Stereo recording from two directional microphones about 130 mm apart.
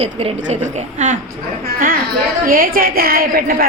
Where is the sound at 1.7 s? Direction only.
90° right.